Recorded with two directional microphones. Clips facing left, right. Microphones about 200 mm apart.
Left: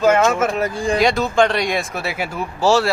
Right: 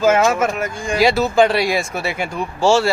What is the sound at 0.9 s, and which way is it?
Speech, 5° right (ahead or behind).